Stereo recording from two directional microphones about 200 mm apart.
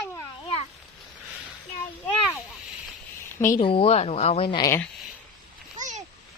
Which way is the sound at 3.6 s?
25° left (ahead or behind).